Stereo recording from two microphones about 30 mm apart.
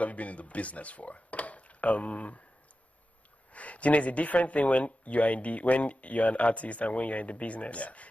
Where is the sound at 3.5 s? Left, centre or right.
Left.